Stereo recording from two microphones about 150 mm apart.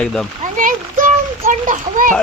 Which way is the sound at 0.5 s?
60° right (ahead or behind).